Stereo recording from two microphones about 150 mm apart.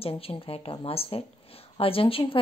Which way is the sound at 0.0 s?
40° left (ahead or behind).